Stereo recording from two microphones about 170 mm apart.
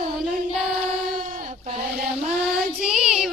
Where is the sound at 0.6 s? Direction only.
5° right (ahead or behind).